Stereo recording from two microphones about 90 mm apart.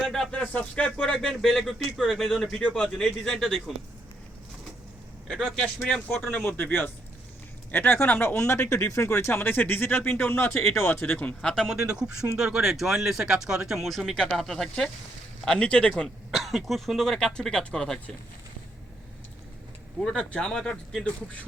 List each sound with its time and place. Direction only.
0.0 s speech: 5° left (ahead or behind)
5.5 s speech: 10° left (ahead or behind)
11.8 s speech: 10° right (ahead or behind); by 16.0 s 10° left (ahead or behind)
16.3 s speech: centre (ahead or behind)
20.0 s speech: 10° left (ahead or behind)